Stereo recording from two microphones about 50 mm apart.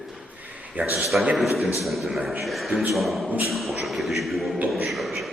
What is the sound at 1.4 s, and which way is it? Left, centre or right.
A man's voice, centre.